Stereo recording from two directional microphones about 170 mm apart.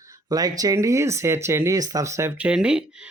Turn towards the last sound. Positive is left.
turn(degrees=-5)  # may be behind; listen again after turning